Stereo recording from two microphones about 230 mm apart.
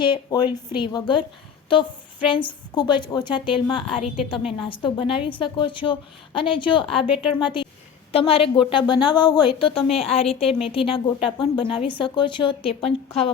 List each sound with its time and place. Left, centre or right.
0.0 s a woman's voice: centre
2.2 s a woman's voice: left